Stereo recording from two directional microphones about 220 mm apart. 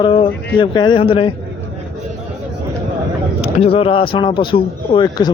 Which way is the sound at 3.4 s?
25° left (ahead or behind).